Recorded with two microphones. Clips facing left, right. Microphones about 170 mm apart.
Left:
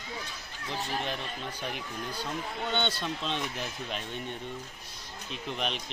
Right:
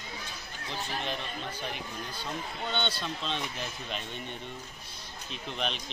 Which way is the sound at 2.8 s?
10° left (ahead or behind).